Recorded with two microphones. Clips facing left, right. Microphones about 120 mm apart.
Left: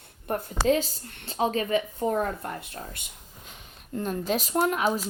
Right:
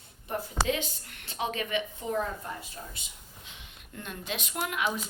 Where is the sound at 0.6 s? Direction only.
40° left (ahead or behind).